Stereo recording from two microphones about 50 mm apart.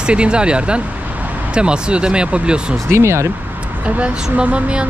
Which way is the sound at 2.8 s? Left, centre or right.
Right.